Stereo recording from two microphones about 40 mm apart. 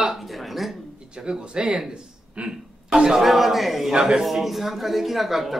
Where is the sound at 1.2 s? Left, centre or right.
Right.